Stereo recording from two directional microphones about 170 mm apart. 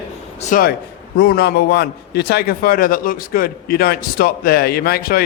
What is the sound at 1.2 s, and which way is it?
A man's voice, 75° left (ahead or behind).